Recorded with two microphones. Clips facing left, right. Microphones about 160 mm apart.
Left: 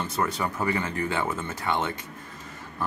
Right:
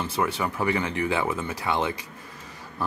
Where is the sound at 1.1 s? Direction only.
10° right (ahead or behind).